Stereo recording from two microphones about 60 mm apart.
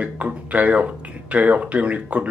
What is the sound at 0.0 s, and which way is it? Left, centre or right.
A man's voice, right.